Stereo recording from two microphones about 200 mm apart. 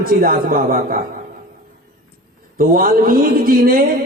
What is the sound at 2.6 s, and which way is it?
A man's voice, 45° right (ahead or behind).